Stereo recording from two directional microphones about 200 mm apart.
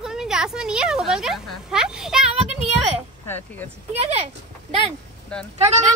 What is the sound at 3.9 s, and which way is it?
Speech, 30° right (ahead or behind).